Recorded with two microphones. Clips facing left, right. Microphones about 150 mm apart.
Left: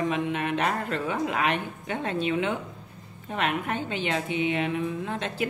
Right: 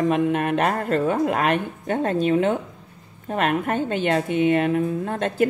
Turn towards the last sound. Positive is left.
turn(degrees=-45)  # may be behind; listen again after turning